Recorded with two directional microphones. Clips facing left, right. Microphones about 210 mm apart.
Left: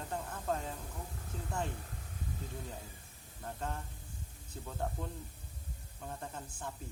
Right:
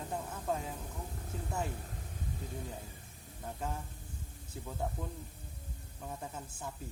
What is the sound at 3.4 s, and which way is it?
Speech, 10° right (ahead or behind).